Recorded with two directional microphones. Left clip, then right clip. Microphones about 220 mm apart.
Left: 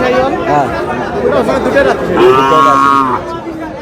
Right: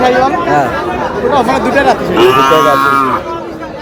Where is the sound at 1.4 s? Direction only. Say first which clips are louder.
Right 1 dB; 35° right (ahead or behind).